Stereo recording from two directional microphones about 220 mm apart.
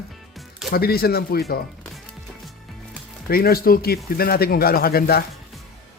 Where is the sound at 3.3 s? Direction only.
45° left (ahead or behind).